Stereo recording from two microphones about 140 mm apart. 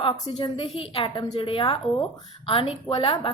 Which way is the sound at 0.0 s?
40° left (ahead or behind).